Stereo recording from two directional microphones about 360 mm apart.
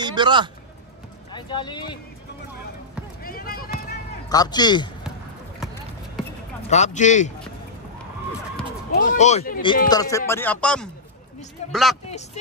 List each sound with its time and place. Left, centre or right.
0.0 s speech: centre
1.3 s speech: centre
3.2 s basketball bounce: left
4.3 s speech: centre
6.7 s speech: centre
9.1 s speech: centre